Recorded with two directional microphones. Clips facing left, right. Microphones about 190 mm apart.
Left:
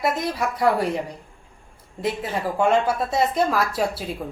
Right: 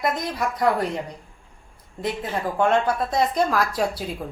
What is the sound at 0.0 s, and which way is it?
Speech, 5° left (ahead or behind).